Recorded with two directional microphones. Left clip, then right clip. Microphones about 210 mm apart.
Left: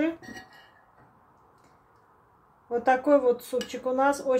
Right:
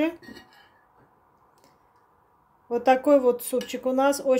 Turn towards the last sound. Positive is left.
turn(degrees=-45)  # may be behind; listen again after turning